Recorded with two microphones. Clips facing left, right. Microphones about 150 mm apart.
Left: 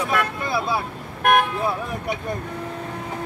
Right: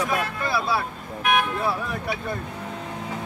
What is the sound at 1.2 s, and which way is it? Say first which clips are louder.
Vehicle: left 4 dB; 50° left (ahead or behind).